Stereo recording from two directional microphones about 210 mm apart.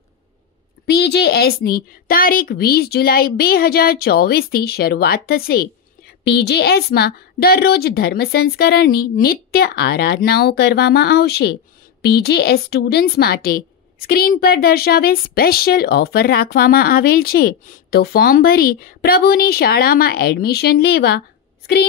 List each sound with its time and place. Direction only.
0.8 s a woman's voice: 50° left (ahead or behind)